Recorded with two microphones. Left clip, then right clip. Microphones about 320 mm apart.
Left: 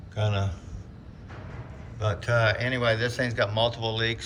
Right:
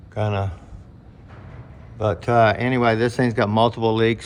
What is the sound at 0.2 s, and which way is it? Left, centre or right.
Speech, centre.